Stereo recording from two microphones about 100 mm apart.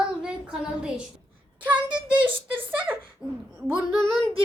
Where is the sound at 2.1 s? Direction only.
55° right (ahead or behind).